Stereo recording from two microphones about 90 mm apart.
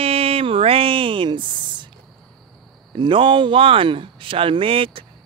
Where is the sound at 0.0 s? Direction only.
90° right; by 1.9 s 65° right (ahead or behind).